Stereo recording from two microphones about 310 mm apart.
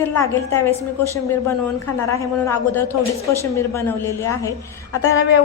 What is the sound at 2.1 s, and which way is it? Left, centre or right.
A woman's voice, centre.